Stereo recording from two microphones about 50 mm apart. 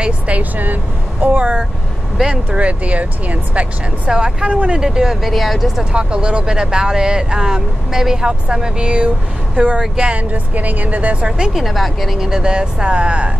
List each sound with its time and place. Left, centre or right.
0.0 s speech: right
2.6 s speech: right
4.1 s speech: centre
5.9 s speech: centre
11.2 s speech: centre
11.5 s speech: centre
12.2 s speech: centre